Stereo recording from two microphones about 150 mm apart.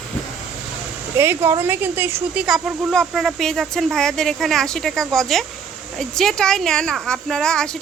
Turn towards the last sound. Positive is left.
turn(degrees=5)  # may be behind; listen again after turning